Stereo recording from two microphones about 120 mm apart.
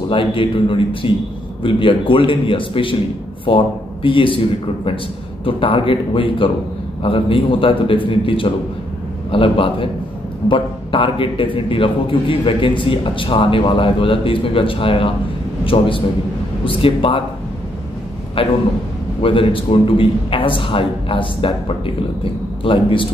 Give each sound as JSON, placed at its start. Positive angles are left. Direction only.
{"t": 0.1, "sound": "a man's voice", "side_deg": 45}
{"t": 5.4, "sound": "a man's voice", "side_deg": 50}
{"t": 18.4, "sound": "a man's voice", "side_deg": 50}